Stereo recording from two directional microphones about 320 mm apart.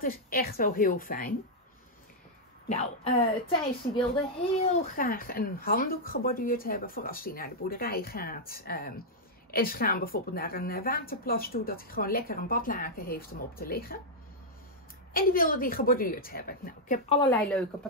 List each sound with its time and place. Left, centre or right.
0.0 s speech: left
2.7 s a woman's voice: centre
15.1 s speech: left